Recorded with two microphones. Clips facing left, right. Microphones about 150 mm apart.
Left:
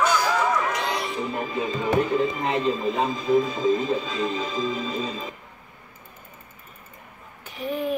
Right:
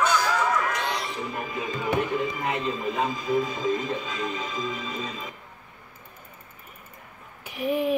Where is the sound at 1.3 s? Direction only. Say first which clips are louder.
Left 4 dB; 30° left (ahead or behind).